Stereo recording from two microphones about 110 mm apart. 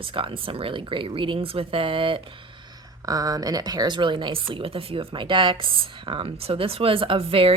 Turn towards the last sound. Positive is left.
turn(degrees=-55)  # may be behind; listen again after turning